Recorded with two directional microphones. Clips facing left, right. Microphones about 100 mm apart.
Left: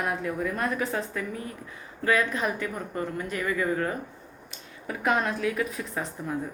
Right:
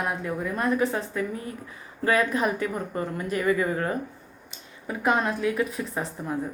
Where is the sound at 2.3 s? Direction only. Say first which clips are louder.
Right 4 dB; 20° right (ahead or behind).